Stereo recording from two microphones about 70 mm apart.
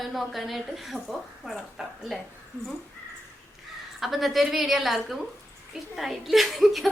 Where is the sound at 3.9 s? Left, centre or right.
Centre.